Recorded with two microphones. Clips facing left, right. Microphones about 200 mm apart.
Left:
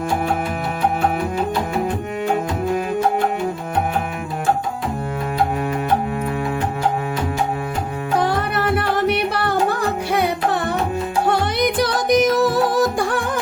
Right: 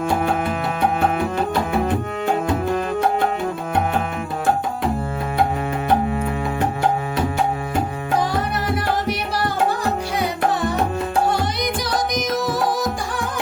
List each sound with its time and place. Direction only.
8.2 s music: 60° left (ahead or behind)